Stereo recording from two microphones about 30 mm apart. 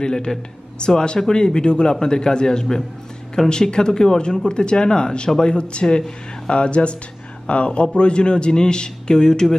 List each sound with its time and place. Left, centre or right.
0.0 s speech: left
6.5 s a man's voice: left